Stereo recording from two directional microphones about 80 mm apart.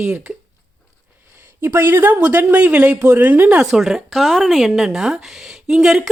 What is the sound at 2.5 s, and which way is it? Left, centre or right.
A woman's voice, centre.